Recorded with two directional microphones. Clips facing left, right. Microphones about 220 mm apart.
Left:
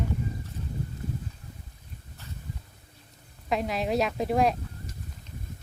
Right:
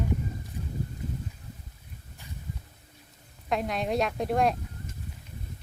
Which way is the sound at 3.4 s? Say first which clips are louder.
Left 1 dB; centre (ahead or behind).